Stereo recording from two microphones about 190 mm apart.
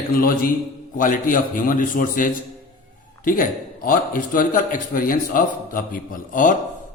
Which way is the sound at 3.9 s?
45° left (ahead or behind).